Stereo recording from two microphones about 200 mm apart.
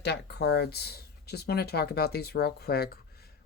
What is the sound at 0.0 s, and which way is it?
Speech, 55° left (ahead or behind).